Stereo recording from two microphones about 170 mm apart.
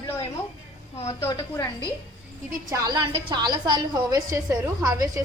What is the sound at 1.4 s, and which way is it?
Speech, 20° left (ahead or behind).